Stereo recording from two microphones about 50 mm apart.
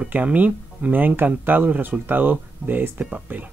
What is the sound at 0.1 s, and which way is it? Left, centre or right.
Speech, right.